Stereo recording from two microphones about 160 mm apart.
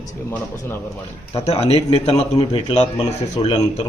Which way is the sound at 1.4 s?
40° left (ahead or behind).